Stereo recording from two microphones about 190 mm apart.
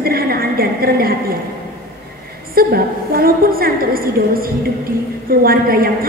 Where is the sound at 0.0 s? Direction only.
50° right (ahead or behind).